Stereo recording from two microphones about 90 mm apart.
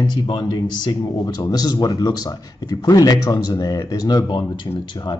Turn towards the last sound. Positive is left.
turn(degrees=45)  # may be behind; listen again after turning